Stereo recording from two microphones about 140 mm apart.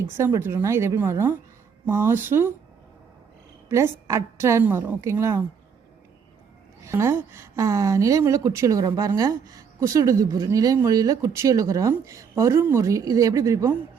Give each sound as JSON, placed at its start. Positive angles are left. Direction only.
{"t": 0.2, "sound": "a woman's voice", "side_deg": -20}
{"t": 3.7, "sound": "a woman's voice", "side_deg": -20}
{"t": 6.8, "sound": "a woman's voice", "side_deg": -20}